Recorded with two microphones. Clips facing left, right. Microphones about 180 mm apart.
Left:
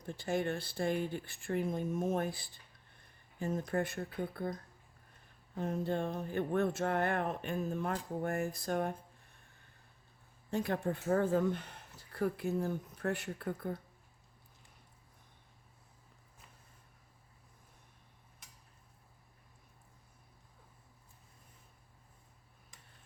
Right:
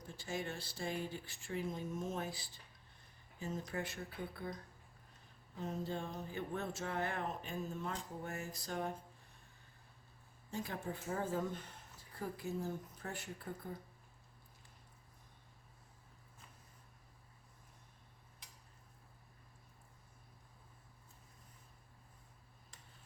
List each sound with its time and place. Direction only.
0.1 s speech: 60° left (ahead or behind)
5.5 s speech: 60° left (ahead or behind)
10.5 s speech: 65° left (ahead or behind)